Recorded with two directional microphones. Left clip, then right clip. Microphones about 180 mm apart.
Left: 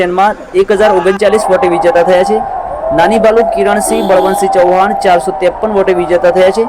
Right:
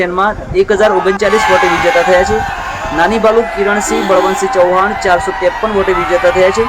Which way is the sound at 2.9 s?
15° left (ahead or behind).